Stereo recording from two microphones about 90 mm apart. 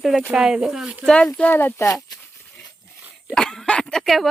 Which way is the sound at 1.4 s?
20° left (ahead or behind).